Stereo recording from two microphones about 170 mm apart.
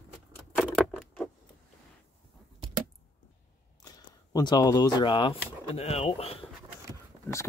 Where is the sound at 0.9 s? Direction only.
Centre (ahead or behind).